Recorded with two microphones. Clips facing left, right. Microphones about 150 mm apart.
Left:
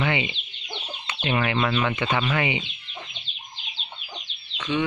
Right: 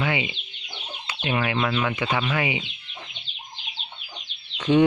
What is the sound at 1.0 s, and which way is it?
Speech, 10° right (ahead or behind).